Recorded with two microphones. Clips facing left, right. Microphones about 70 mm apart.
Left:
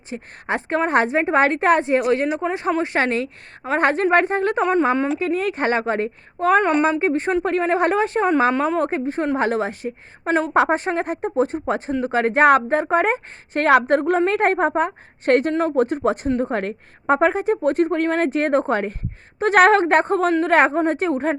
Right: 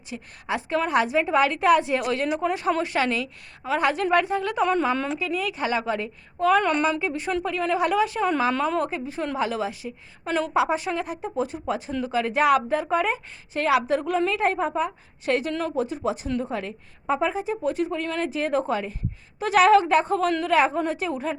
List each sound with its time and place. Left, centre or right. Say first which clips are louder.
0.1 s a woman's voice: left 4 dB; left
5.2 s a woman's voice: left 6 dB; left